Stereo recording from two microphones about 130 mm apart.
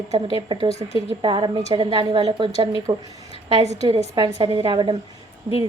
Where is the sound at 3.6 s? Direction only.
60° right (ahead or behind).